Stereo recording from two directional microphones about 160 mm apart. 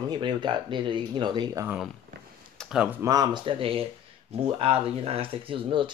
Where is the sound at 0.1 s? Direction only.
30° right (ahead or behind).